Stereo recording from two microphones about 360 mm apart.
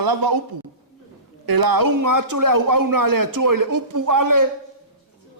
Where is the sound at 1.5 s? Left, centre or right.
Right.